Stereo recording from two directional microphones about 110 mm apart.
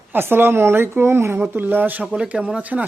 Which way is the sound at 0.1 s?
20° right (ahead or behind).